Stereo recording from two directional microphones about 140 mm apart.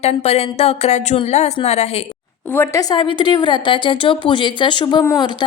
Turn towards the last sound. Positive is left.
turn(degrees=30)  # may be behind; listen again after turning